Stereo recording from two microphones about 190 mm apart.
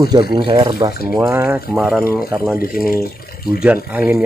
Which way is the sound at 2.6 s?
50° left (ahead or behind).